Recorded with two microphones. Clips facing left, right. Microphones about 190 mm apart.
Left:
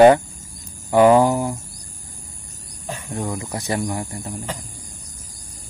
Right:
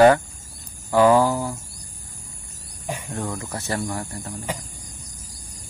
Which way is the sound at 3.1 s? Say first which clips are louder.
Left 5 dB; 15° left (ahead or behind).